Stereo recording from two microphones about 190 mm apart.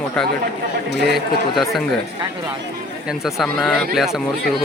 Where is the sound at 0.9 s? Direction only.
60° right (ahead or behind).